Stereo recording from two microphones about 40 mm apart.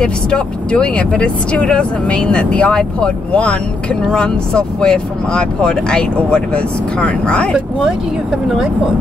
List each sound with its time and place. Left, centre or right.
0.0 s speech: left